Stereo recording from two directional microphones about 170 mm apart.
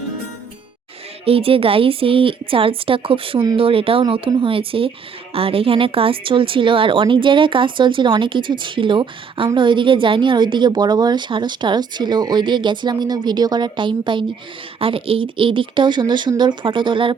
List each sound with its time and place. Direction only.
1.2 s a woman's voice: 35° right (ahead or behind)